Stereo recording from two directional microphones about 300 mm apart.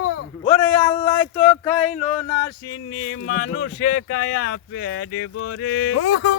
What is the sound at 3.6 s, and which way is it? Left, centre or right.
Speech, left.